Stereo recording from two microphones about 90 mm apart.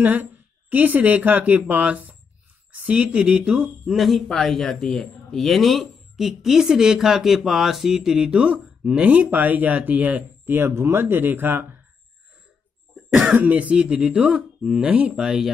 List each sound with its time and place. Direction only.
0.0 s a woman's voice: 20° right (ahead or behind)
3.9 s speech: centre (ahead or behind); by 11.6 s 25° right (ahead or behind)
13.4 s speech: 15° right (ahead or behind)
15.2 s speech: 5° right (ahead or behind)